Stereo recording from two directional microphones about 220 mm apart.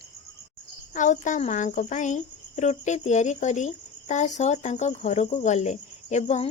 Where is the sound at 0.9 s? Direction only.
35° left (ahead or behind).